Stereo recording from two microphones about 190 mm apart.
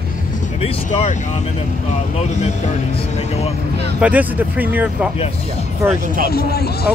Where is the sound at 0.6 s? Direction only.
40° left (ahead or behind).